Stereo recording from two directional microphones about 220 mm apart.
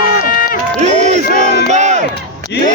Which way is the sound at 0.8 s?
30° right (ahead or behind).